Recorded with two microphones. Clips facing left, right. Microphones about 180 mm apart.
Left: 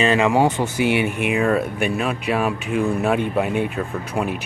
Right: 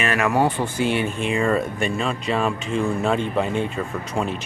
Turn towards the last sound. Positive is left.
turn(degrees=10)  # may be behind; listen again after turning